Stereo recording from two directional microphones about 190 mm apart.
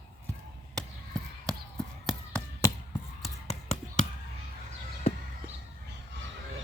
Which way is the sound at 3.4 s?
35° left (ahead or behind).